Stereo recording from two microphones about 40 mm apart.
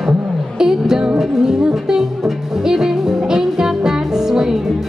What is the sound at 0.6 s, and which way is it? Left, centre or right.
Music, centre.